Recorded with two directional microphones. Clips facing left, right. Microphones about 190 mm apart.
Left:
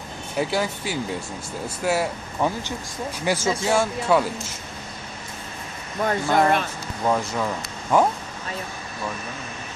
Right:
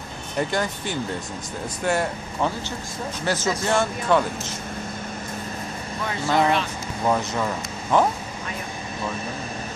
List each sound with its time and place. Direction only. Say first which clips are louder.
0.3 s speech: left 1 dB; 5° left (ahead or behind)
6.0 s speech: left 2 dB; 50° left (ahead or behind)
7.0 s speech: even; centre (ahead or behind)